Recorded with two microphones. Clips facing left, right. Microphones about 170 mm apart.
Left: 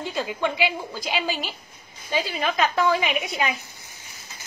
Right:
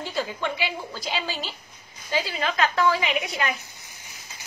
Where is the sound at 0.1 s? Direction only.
15° left (ahead or behind).